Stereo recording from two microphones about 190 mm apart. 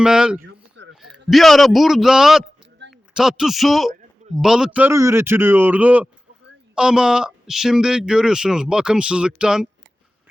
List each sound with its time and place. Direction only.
0.0 s speech: 5° right (ahead or behind)
0.4 s a sound: 70° right (ahead or behind)
1.3 s a man's voice: centre (ahead or behind)